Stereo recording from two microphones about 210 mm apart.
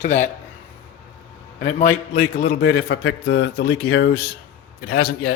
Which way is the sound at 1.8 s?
40° left (ahead or behind).